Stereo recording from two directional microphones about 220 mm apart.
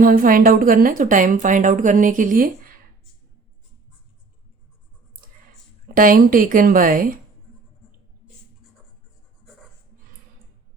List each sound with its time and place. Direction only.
0.0 s a woman's voice: 40° right (ahead or behind)
5.9 s a woman's voice: 40° right (ahead or behind)